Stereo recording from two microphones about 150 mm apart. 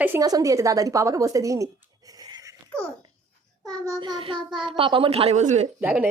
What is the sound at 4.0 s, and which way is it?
A child's voice, 30° right (ahead or behind).